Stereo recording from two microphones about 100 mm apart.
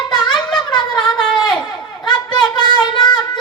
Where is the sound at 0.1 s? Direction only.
45° left (ahead or behind).